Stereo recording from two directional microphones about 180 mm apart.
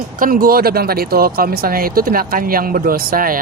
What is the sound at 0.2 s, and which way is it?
Speech, 50° right (ahead or behind).